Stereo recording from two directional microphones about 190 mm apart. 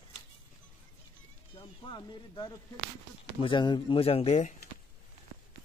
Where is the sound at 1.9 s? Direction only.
20° left (ahead or behind).